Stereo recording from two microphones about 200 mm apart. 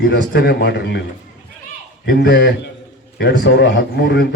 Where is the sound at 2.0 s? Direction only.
55° left (ahead or behind).